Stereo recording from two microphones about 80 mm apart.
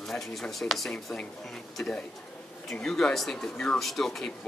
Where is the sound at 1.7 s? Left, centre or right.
Centre.